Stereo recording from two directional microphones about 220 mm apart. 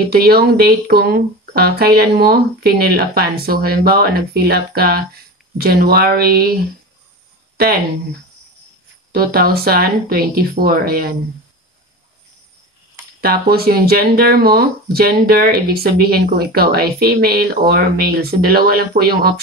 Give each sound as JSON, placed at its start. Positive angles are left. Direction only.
{"t": 0.0, "sound": "speech", "side_deg": -45}
{"t": 9.1, "sound": "speech", "side_deg": -45}
{"t": 13.2, "sound": "speech", "side_deg": -45}